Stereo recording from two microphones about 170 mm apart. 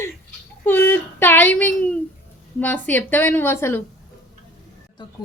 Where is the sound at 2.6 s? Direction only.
10° left (ahead or behind).